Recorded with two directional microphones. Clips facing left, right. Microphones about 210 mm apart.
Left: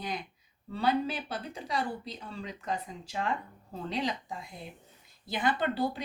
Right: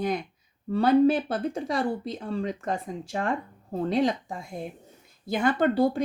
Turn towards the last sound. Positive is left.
turn(degrees=-45)  # may be behind; listen again after turning